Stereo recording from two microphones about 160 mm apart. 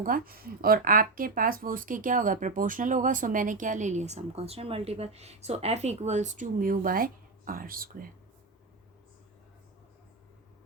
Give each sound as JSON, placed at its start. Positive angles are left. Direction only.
{"t": 0.0, "sound": "speech", "side_deg": -65}